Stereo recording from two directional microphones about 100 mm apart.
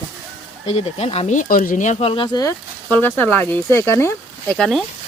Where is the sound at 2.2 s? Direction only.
45° left (ahead or behind).